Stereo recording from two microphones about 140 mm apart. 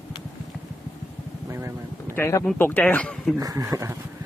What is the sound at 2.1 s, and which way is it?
Speech, 20° left (ahead or behind).